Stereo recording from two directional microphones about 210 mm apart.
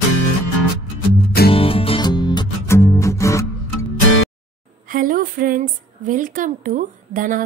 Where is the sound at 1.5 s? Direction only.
25° left (ahead or behind).